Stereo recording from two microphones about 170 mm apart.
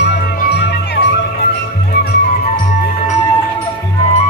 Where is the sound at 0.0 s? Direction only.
80° left.